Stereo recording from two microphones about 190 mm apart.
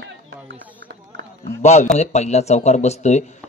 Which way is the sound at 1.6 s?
35° left (ahead or behind).